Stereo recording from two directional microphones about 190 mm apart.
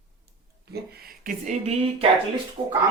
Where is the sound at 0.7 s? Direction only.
55° right (ahead or behind); by 2.1 s 35° right (ahead or behind).